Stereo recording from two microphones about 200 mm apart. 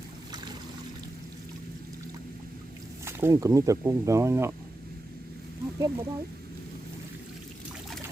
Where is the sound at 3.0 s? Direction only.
15° right (ahead or behind).